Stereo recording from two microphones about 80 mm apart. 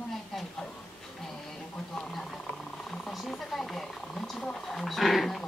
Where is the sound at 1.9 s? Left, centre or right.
Centre.